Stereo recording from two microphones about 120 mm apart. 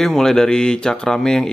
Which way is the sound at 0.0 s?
5° left (ahead or behind).